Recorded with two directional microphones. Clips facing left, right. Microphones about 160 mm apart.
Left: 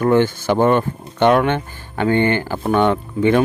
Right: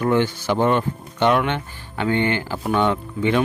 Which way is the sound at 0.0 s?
50° left (ahead or behind).